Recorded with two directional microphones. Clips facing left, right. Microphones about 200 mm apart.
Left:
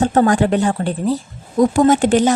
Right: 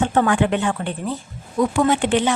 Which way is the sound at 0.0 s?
40° left (ahead or behind).